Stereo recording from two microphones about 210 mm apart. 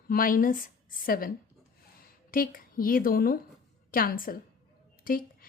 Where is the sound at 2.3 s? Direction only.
40° left (ahead or behind).